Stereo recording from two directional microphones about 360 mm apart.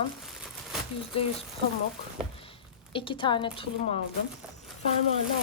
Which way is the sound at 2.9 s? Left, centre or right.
Centre.